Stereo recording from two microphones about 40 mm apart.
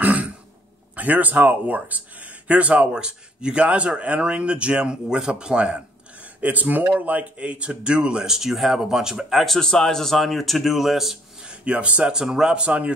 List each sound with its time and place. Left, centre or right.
0.0 s throat clearing: right
0.9 s speech: right
2.9 s speech: right
6.4 s speech: right; by 9.6 s centre
9.6 s speech: centre
11.4 s speech: right
12.1 s speech: centre; by 12.9 s right